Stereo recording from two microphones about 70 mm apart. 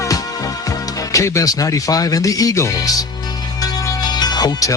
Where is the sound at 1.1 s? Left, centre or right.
Left.